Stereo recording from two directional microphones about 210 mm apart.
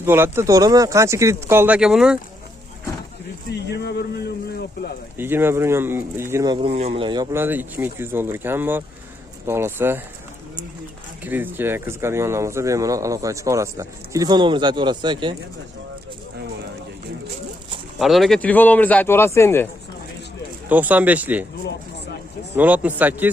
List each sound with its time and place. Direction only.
0.0 s speech: 10° right (ahead or behind)
3.5 s speech: 55° left (ahead or behind)
5.1 s speech: 10° right (ahead or behind)
11.3 s speech: 10° right (ahead or behind)
18.0 s speech: centre (ahead or behind)
20.7 s speech: 10° right (ahead or behind)
22.5 s speech: 5° right (ahead or behind)